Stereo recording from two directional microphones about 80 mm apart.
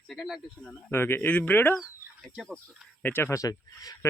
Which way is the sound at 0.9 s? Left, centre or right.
Left.